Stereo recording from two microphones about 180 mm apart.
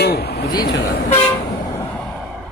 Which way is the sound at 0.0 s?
60° left (ahead or behind).